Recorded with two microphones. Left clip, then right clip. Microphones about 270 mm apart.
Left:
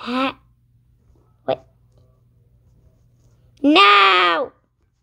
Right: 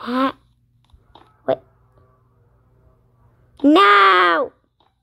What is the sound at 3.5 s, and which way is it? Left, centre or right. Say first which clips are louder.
Speech: even; centre.